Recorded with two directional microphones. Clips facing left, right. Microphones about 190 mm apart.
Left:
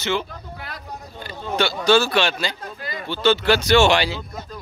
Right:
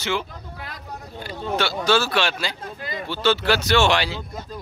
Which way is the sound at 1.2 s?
5° right (ahead or behind).